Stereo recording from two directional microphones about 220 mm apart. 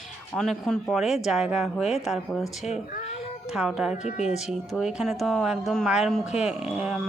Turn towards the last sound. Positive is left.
turn(degrees=0)  # may be behind; listen again after turning